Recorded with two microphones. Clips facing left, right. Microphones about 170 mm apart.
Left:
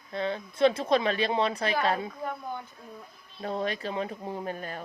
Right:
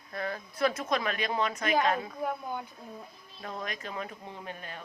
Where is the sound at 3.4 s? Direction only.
30° left (ahead or behind).